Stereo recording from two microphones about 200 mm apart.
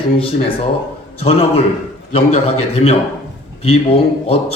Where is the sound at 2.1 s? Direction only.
35° left (ahead or behind).